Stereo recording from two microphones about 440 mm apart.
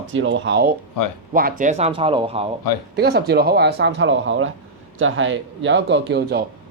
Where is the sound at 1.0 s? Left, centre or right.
Left.